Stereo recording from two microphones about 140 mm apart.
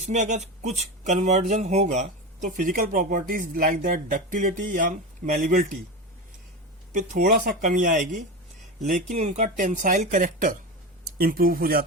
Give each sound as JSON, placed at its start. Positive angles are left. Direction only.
{"t": 0.0, "sound": "speech", "side_deg": -60}
{"t": 6.9, "sound": "speech", "side_deg": -80}
{"t": 11.2, "sound": "speech", "side_deg": -90}